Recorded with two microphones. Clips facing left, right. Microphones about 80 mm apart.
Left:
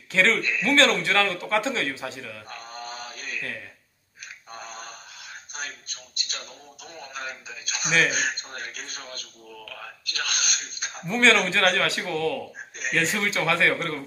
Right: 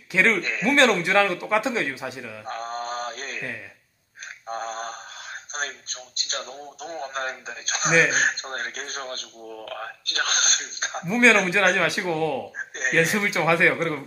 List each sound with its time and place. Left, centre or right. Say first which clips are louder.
0.1 s a man's voice: right 1 dB; centre
0.4 s speech: even; right
0.7 s a man's voice: right 2 dB; centre
2.4 s mantra: right 8 dB; right
4.5 s a sound: right 9 dB; right
6.3 s speech: right 7 dB; right
11.1 s a man's voice: right 2 dB; centre
12.5 s speech: right 5 dB; right
12.9 s a man's voice: right 3 dB; centre